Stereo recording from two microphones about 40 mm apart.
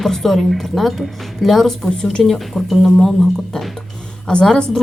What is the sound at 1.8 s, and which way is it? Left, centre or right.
Speech, centre.